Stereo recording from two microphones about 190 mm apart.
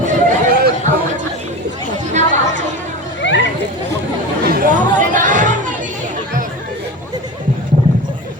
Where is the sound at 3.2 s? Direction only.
70° left (ahead or behind).